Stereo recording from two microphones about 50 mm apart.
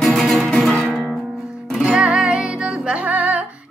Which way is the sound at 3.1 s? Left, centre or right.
Right.